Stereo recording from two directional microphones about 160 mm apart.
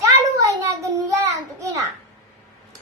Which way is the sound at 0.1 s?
20° right (ahead or behind).